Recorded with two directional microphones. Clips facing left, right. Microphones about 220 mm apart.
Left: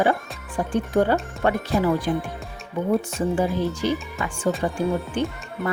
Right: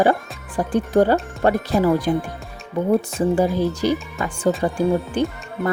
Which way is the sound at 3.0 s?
35° right (ahead or behind).